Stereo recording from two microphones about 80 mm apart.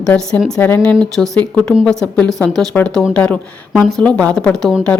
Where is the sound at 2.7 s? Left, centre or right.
Centre.